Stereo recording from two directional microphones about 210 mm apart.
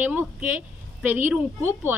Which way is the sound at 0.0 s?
10° right (ahead or behind).